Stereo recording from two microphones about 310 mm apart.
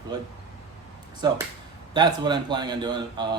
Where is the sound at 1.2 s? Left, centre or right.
Centre.